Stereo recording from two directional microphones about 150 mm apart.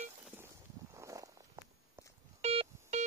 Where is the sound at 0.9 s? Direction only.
20° right (ahead or behind).